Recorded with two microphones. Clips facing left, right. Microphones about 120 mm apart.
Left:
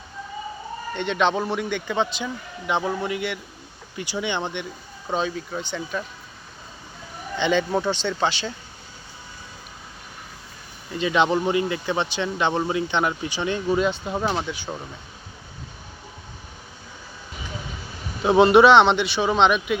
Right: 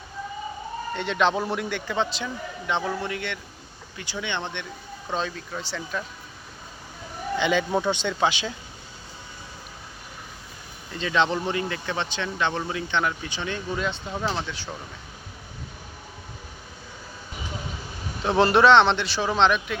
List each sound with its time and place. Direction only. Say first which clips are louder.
0.9 s a man's voice: left 1 dB; centre (ahead or behind)
7.3 s a man's voice: left 2 dB; 5° right (ahead or behind)
10.9 s speech: left 3 dB; 15° left (ahead or behind)
18.2 s a man's voice: left 5 dB; 10° left (ahead or behind)